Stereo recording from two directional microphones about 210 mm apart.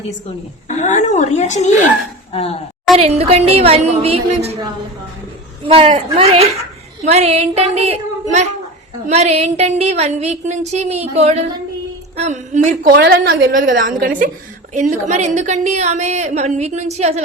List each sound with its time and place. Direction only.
0.8 s a woman's voice: 35° left (ahead or behind)
3.0 s a woman's voice: 30° right (ahead or behind)
5.6 s a woman's voice: 25° right (ahead or behind)